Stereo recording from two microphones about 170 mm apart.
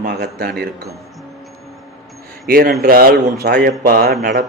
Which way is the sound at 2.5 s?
60° right (ahead or behind).